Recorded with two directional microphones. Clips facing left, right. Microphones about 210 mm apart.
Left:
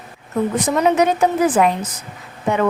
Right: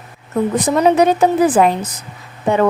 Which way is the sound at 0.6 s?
35° right (ahead or behind).